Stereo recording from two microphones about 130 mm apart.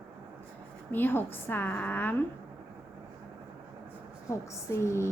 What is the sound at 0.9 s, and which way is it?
A woman's voice, 15° left (ahead or behind).